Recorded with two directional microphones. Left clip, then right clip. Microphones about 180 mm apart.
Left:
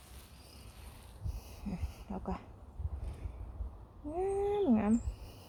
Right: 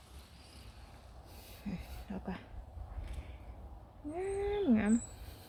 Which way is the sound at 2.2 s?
Centre (ahead or behind).